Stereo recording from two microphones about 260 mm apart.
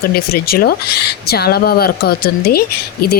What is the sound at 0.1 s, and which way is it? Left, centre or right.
Speech, left.